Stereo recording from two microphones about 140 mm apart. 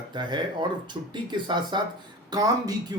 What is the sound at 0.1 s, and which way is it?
Speech, 35° right (ahead or behind).